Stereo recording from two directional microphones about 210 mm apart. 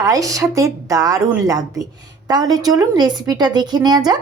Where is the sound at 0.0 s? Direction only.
15° right (ahead or behind).